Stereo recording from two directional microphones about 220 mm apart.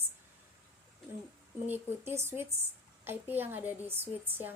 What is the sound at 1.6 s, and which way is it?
Speech, 10° right (ahead or behind).